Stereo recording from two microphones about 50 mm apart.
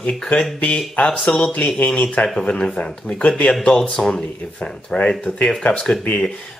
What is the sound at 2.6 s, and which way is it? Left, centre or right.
Speech, centre.